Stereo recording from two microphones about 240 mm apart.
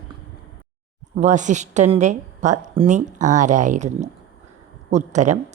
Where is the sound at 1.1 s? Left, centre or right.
Right.